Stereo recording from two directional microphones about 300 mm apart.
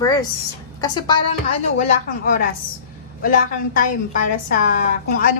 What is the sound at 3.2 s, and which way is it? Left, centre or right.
A woman's voice, left.